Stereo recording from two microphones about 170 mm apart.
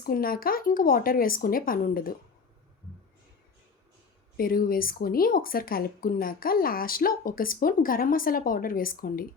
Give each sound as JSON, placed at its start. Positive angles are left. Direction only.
{"t": 0.0, "sound": "speech", "side_deg": 60}
{"t": 4.4, "sound": "speech", "side_deg": 60}